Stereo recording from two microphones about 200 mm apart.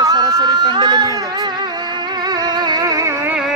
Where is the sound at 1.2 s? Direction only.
20° right (ahead or behind).